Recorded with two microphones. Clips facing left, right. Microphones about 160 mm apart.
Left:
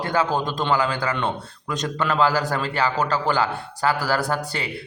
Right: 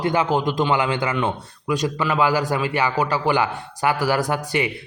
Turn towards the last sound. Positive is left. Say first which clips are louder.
# right 4 dB
turn(degrees=-15)  # may be behind; listen again after turning